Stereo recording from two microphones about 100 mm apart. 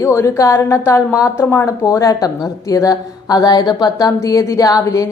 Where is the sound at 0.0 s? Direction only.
30° left (ahead or behind).